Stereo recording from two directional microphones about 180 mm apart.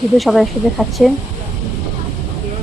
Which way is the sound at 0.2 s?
Centre (ahead or behind).